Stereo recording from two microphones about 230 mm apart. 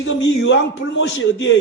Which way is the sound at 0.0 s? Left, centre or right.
Left.